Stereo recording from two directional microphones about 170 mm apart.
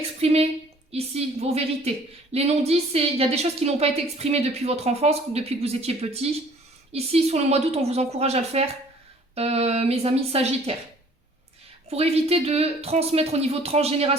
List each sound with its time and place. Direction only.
0.2 s a woman's voice: 40° right (ahead or behind)
11.9 s a woman's voice: 35° right (ahead or behind)